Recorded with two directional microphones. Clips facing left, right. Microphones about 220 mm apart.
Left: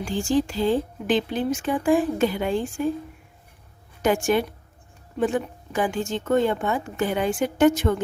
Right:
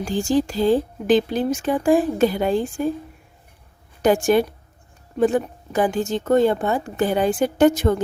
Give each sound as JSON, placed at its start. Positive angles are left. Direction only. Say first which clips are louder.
{"t": 0.0, "sound": "speech", "louder": "right 2 dB", "side_deg": -40}
{"t": 4.0, "sound": "speech", "louder": "right 4 dB", "side_deg": -35}